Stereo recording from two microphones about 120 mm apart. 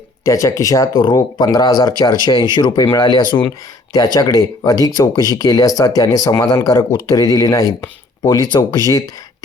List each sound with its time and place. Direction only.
0.3 s speech: 25° left (ahead or behind)